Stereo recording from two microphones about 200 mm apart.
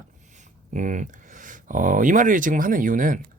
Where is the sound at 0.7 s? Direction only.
40° right (ahead or behind).